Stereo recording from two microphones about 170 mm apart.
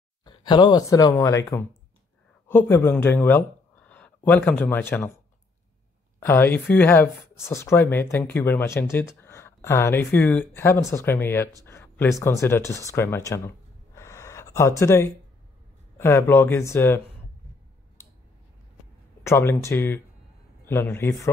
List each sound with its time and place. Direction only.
0.2 s speech: 25° left (ahead or behind)
6.1 s speech: 15° left (ahead or behind)
13.9 s gasp: 15° left (ahead or behind)
16.0 s speech: 15° left (ahead or behind)
19.2 s speech: 15° left (ahead or behind)